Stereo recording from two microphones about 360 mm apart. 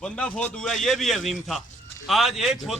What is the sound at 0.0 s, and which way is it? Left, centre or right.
A man's voice, centre.